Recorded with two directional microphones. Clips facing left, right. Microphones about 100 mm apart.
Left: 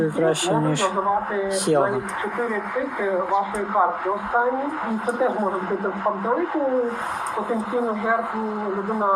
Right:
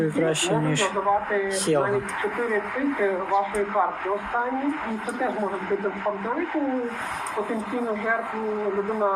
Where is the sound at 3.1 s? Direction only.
20° left (ahead or behind).